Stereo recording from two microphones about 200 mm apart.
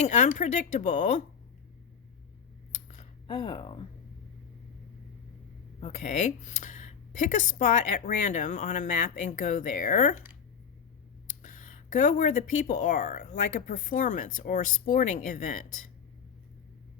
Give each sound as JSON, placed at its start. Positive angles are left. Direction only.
{"t": 0.0, "sound": "speech", "side_deg": 35}
{"t": 2.7, "sound": "a sound", "side_deg": 35}
{"t": 5.8, "sound": "speech", "side_deg": 35}
{"t": 11.3, "sound": "speech", "side_deg": 40}